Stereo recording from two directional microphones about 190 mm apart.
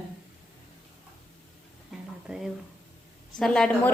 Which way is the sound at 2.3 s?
5° right (ahead or behind).